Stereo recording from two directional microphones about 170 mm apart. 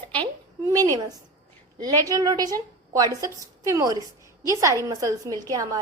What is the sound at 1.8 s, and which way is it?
A woman's voice, 20° right (ahead or behind).